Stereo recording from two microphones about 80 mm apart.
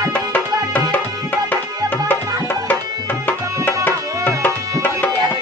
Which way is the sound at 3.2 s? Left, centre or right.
Left.